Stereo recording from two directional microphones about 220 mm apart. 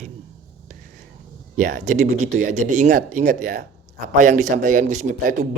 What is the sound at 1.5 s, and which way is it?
Speech, 35° right (ahead or behind).